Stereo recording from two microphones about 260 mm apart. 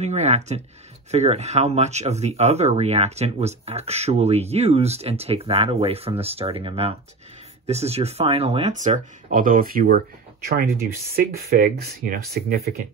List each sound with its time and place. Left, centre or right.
0.0 s speech: right
11.5 s speech: right